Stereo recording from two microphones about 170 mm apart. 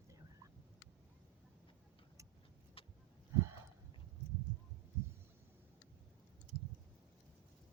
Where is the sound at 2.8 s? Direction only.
35° left (ahead or behind).